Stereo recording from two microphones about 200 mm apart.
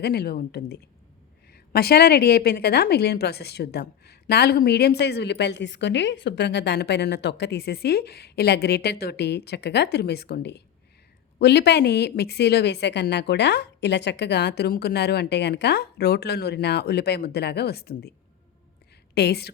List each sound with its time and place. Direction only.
0.0 s a woman's voice: 50° left (ahead or behind)
19.1 s a woman's voice: 55° left (ahead or behind)